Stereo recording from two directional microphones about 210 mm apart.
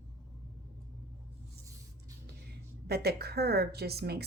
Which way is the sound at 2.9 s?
50° right (ahead or behind).